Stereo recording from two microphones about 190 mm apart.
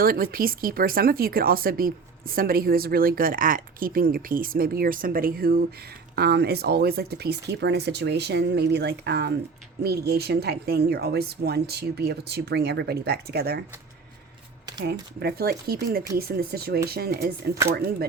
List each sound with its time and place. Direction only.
0.0 s speech: 50° right (ahead or behind)
15.2 s speech: 55° right (ahead or behind)
17.5 s speech: 15° right (ahead or behind)